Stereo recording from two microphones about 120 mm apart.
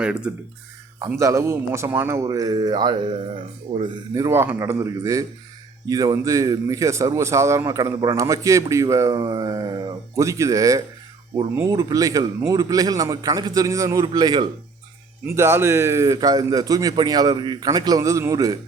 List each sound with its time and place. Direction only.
0.0 s speech: 10° right (ahead or behind)
0.9 s a man's voice: 25° right (ahead or behind)
4.1 s a man's voice: 25° right (ahead or behind)
10.2 s a man's voice: 25° right (ahead or behind)
15.3 s a man's voice: 20° right (ahead or behind)